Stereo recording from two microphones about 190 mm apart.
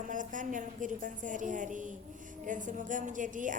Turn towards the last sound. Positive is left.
turn(degrees=-40)  # may be behind; listen again after turning